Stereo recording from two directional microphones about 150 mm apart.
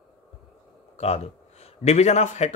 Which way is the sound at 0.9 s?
45° left (ahead or behind).